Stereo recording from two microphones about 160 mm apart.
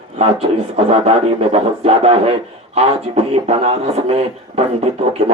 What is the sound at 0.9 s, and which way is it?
Speech, 35° right (ahead or behind).